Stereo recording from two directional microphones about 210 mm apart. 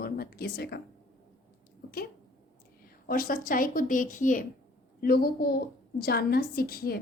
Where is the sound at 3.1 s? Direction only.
40° left (ahead or behind).